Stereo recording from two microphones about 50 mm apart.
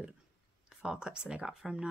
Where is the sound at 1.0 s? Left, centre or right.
Centre.